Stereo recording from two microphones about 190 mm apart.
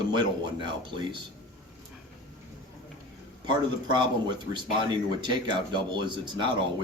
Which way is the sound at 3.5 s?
25° right (ahead or behind).